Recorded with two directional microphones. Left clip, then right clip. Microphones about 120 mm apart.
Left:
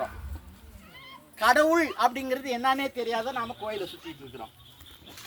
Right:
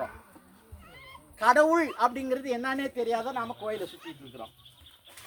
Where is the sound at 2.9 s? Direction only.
35° right (ahead or behind).